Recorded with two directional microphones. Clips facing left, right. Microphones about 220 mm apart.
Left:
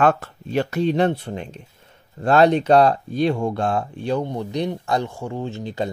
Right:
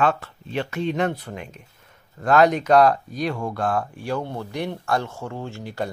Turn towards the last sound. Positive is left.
turn(degrees=20)  # may be behind; listen again after turning